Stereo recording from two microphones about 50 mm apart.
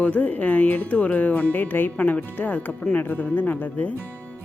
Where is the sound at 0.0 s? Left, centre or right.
Left.